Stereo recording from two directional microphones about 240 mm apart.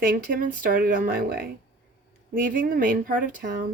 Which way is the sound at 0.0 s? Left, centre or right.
Right.